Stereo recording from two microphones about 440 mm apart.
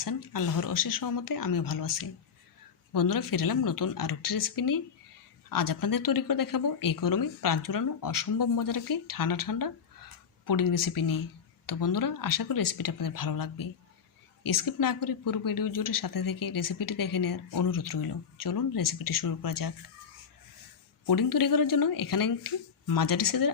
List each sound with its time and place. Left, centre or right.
0.0 s speech: left
21.1 s speech: left